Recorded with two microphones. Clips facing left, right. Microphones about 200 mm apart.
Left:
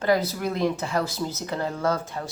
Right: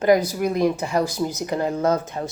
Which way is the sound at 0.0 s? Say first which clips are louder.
Right 5 dB; 15° right (ahead or behind).